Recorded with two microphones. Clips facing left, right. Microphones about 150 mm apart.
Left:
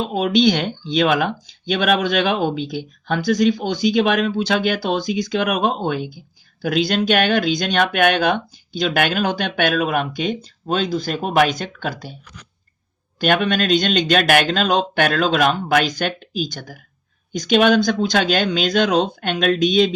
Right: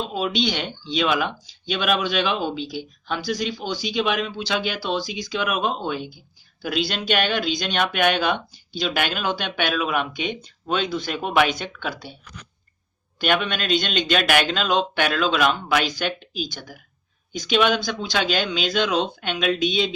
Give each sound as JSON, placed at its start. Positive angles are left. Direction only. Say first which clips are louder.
{"t": 0.0, "sound": "speech", "louder": "left 7 dB", "side_deg": 50}
{"t": 13.1, "sound": "speech", "louder": "left 5 dB", "side_deg": 45}